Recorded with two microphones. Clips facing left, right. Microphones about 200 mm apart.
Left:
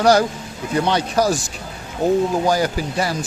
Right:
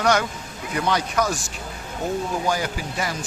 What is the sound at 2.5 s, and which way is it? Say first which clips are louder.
Speech: left 6 dB; 40° left (ahead or behind).